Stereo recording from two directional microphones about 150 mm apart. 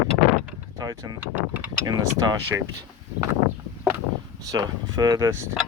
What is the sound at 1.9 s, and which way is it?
Speech, 25° right (ahead or behind).